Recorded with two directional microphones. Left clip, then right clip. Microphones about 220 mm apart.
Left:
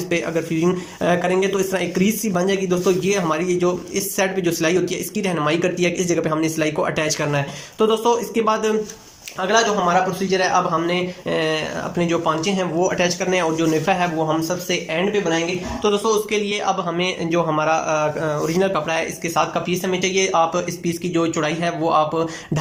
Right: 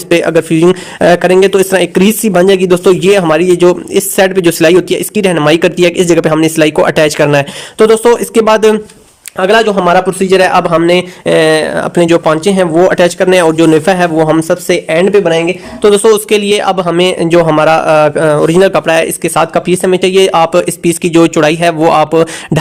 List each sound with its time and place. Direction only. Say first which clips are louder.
0.1 s speech: right 15 dB; 45° right (ahead or behind)